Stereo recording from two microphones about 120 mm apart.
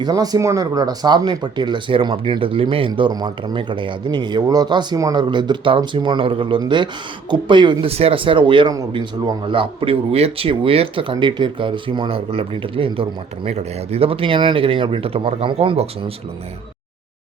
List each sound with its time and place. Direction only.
0.0 s speech: 30° right (ahead or behind)
7.9 s speech: 55° right (ahead or behind)